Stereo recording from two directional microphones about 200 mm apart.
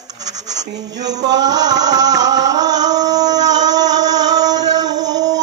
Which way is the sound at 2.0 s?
20° right (ahead or behind).